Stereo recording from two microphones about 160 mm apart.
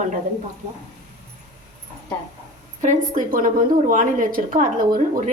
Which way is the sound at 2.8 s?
50° right (ahead or behind).